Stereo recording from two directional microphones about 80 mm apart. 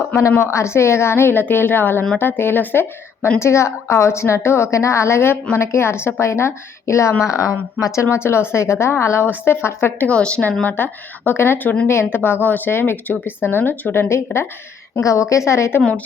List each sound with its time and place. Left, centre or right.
0.2 s a woman's voice: left
8.1 s a woman's voice: left
10.1 s speech: centre; by 14.4 s left
15.0 s a woman's voice: left